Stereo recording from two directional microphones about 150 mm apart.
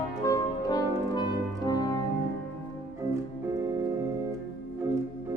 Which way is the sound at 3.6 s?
20° right (ahead or behind).